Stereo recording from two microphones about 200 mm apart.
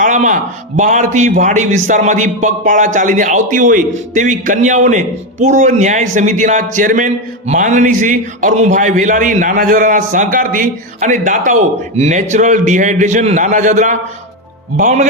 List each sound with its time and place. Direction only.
0.0 s a man's voice: 40° right (ahead or behind)